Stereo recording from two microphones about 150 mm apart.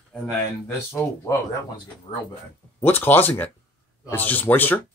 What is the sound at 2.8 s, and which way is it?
Speech, 15° left (ahead or behind).